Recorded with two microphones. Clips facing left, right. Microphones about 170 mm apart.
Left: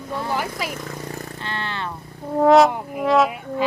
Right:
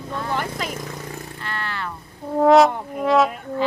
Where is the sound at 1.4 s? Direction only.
20° left (ahead or behind).